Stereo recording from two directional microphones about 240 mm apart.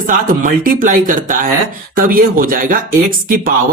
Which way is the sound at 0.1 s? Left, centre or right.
Right.